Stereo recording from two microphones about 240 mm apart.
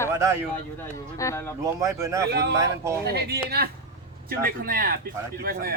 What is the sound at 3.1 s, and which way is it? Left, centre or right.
A man's voice, right.